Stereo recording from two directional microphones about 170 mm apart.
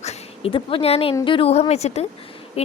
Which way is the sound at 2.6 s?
35° left (ahead or behind).